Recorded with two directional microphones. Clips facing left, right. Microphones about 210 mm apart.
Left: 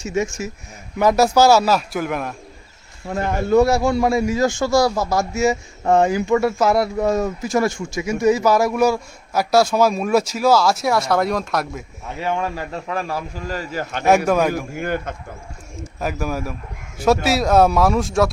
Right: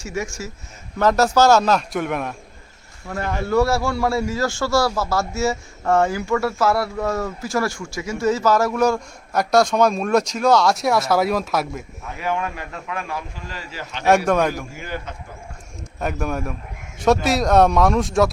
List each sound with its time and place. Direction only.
0.0 s a man's voice: 20° left (ahead or behind); by 2.3 s centre (ahead or behind)
3.1 s a man's voice: 20° left (ahead or behind); by 11.9 s centre (ahead or behind)
12.2 s a man's voice: 30° left (ahead or behind); by 14.0 s 45° left (ahead or behind)
14.3 s speech: 5° left (ahead or behind)
14.7 s a man's voice: 55° left (ahead or behind)
16.0 s speech: centre (ahead or behind)